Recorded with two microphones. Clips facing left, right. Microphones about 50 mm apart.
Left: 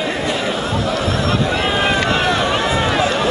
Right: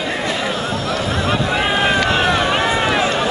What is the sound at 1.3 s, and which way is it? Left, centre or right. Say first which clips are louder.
Vehicle: right 2 dB; centre.